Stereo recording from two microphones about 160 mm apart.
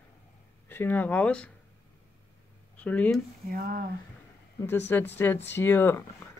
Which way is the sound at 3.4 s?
65° right (ahead or behind).